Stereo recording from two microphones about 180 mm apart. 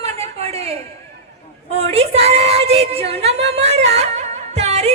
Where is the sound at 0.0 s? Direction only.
35° right (ahead or behind).